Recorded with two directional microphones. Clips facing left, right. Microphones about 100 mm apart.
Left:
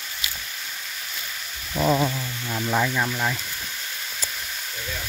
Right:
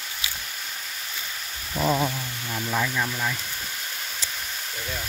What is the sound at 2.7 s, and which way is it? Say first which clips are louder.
Speech: left 3 dB; 20° left (ahead or behind).